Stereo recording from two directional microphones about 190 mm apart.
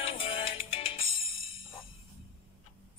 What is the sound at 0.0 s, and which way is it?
Music, 30° left (ahead or behind).